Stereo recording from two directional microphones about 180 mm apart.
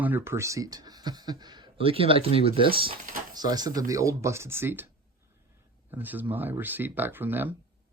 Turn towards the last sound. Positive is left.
turn(degrees=-10)  # may be behind; listen again after turning